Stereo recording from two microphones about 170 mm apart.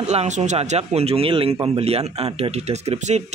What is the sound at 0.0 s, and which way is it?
A man's voice, 45° right (ahead or behind).